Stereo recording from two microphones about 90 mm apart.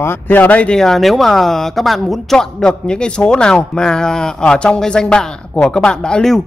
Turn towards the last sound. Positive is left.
turn(degrees=5)  # may be behind; listen again after turning